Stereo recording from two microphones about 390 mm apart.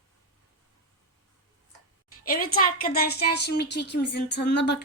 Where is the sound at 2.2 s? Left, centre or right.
Left.